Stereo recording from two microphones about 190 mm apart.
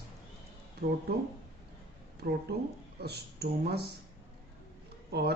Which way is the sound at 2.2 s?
50° right (ahead or behind).